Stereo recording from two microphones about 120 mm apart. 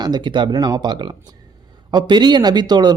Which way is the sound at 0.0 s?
40° right (ahead or behind).